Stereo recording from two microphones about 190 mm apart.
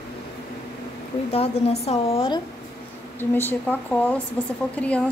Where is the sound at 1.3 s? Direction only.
35° left (ahead or behind).